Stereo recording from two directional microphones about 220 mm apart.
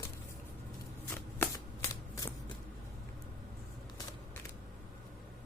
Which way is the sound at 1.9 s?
15° left (ahead or behind).